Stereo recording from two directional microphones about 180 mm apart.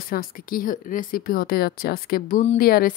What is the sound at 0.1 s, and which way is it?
Speech, 55° left (ahead or behind).